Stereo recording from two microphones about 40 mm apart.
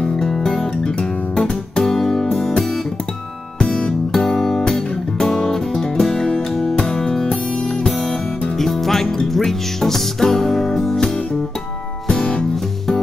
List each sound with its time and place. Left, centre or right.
0.0 s music: centre
3.5 s music: left
4.1 s music: centre
8.5 s music: centre
12.1 s music: left